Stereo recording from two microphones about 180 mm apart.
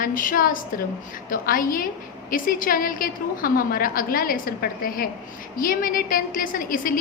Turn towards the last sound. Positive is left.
turn(degrees=50)  # may be behind; listen again after turning